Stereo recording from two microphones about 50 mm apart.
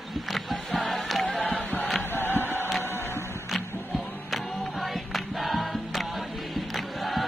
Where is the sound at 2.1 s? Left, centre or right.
Left.